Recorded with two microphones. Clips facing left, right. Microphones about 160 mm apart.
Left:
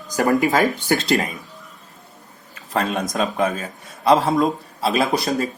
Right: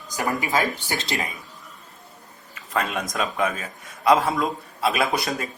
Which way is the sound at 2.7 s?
35° left (ahead or behind).